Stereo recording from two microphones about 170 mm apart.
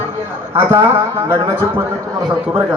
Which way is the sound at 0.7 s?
15° right (ahead or behind).